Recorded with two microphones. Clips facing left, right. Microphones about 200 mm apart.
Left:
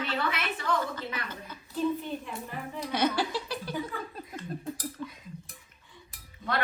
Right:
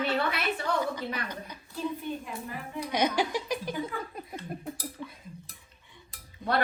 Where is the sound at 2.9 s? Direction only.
15° right (ahead or behind).